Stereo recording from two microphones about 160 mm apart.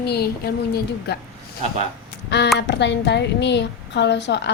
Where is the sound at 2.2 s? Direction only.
90° left.